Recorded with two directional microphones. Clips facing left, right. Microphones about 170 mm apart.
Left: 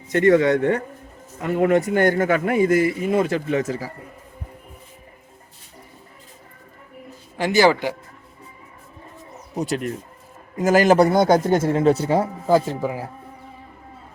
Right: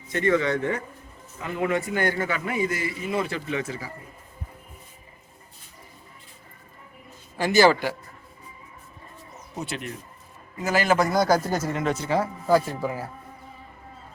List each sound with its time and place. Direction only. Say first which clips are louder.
0.1 s a man's voice: left 7 dB; 50° left (ahead or behind)
0.6 s a man's voice: left 7 dB; 65° left (ahead or behind)
1.4 s a man's voice: left 8 dB; 50° left (ahead or behind)
7.3 s a man's voice: left 2 dB; 20° left (ahead or behind)
9.6 s a man's voice: left 8 dB; 40° left (ahead or behind); by 13.1 s 15° left (ahead or behind)